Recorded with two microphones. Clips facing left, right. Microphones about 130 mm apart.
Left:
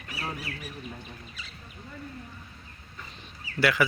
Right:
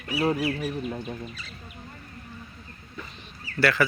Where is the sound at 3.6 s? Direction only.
15° left (ahead or behind).